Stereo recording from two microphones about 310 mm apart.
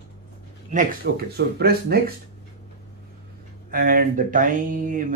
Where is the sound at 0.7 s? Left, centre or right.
Right.